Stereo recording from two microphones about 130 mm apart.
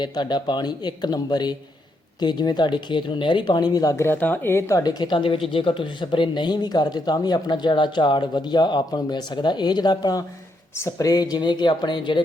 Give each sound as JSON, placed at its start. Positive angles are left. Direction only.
{"t": 0.0, "sound": "speech", "side_deg": 35}
{"t": 4.8, "sound": "speech", "side_deg": 30}
{"t": 10.8, "sound": "speech", "side_deg": 20}